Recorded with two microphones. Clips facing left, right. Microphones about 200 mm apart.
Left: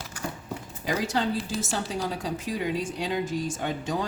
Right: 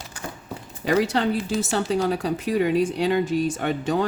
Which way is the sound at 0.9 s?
65° right (ahead or behind).